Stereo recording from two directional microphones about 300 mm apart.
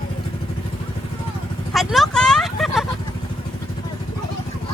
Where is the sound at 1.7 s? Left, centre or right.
Centre.